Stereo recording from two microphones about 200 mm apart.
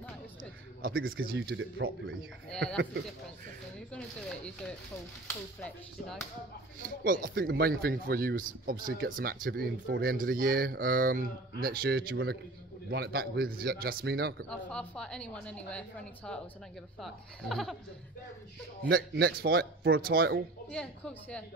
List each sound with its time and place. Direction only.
0.9 s speech: 90° right
1.2 s speech: 50° right (ahead or behind)
1.6 s speech: 70° right (ahead or behind)
2.5 s a woman's voice: 5° left (ahead or behind)
7.1 s speech: 50° right (ahead or behind)
14.5 s a woman's voice: 5° left (ahead or behind)
18.9 s speech: 50° right (ahead or behind)
20.7 s a woman's voice: 5° left (ahead or behind)